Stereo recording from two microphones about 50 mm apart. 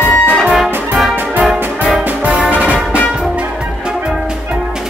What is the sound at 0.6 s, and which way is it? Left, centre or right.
Music, centre.